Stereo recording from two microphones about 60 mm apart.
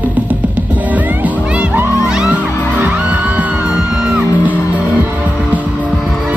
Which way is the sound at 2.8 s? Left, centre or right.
Right.